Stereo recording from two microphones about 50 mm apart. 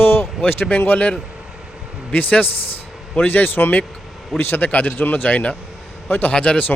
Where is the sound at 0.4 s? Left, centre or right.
Left.